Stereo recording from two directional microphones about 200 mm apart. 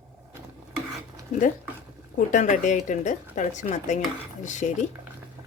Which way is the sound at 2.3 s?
40° left (ahead or behind).